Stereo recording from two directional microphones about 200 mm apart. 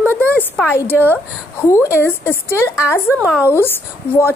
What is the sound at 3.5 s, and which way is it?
Speech, 10° left (ahead or behind).